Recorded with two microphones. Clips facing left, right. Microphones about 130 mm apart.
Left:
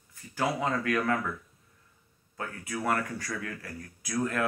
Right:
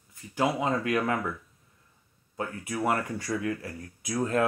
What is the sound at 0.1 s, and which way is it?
Speech, 20° right (ahead or behind).